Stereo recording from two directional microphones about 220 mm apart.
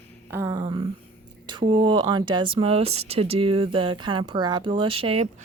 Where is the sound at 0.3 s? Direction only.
15° right (ahead or behind).